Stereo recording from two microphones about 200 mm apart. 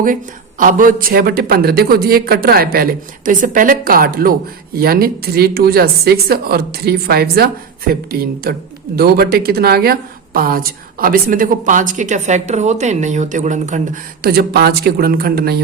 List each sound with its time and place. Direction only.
0.6 s speech: 40° right (ahead or behind)